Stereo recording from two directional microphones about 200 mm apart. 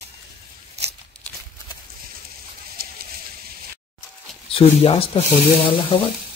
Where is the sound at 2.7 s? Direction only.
50° right (ahead or behind).